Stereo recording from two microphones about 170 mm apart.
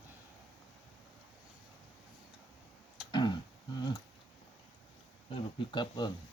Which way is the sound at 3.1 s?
25° left (ahead or behind).